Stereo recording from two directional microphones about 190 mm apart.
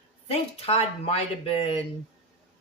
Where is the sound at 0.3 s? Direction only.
30° left (ahead or behind).